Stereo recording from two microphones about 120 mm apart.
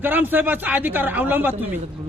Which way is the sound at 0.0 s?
15° right (ahead or behind).